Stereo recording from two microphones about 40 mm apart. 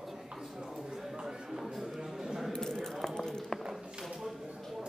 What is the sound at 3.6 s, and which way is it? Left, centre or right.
Speech, centre.